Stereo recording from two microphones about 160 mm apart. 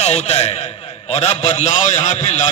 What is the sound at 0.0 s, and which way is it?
A man's voice, 45° left (ahead or behind).